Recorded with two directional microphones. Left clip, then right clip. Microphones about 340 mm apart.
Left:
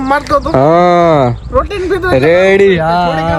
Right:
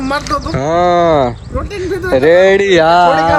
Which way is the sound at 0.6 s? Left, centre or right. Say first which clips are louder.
Left 2 dB; left.